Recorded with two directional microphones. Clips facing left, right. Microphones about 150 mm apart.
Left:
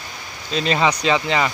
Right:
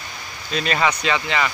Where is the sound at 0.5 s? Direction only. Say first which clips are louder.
Left 2 dB; 25° left (ahead or behind).